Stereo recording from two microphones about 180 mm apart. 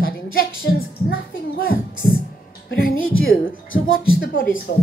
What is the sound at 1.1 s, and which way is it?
A woman's voice, 55° left (ahead or behind).